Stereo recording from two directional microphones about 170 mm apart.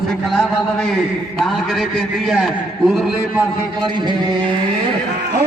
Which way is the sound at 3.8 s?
25° right (ahead or behind).